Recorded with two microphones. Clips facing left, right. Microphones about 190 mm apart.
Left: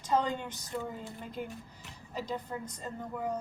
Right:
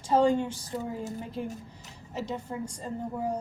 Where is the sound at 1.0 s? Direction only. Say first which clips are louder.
Right 7 dB; 40° right (ahead or behind).